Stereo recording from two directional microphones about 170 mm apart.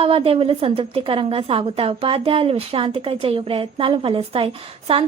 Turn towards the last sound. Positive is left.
turn(degrees=-35)  # may be behind; listen again after turning